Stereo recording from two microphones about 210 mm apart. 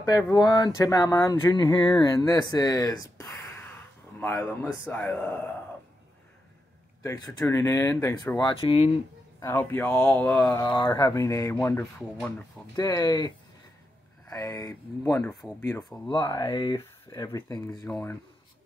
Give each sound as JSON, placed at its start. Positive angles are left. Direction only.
{"t": 0.0, "sound": "speech", "side_deg": 20}
{"t": 7.0, "sound": "speech", "side_deg": 15}
{"t": 9.4, "sound": "speech", "side_deg": 10}
{"t": 10.6, "sound": "speech", "side_deg": 20}
{"t": 17.8, "sound": "speech", "side_deg": 5}